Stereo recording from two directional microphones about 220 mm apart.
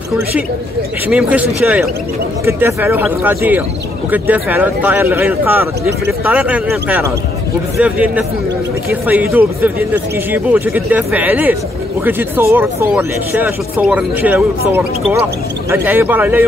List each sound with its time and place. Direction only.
1.0 s speech: 5° right (ahead or behind)